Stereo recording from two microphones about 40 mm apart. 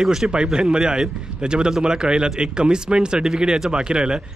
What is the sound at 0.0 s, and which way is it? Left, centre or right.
A man's voice, centre.